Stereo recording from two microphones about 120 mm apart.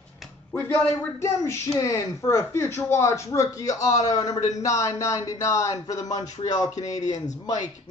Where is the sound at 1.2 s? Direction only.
25° left (ahead or behind).